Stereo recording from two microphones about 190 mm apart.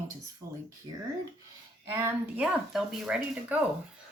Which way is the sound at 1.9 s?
15° right (ahead or behind).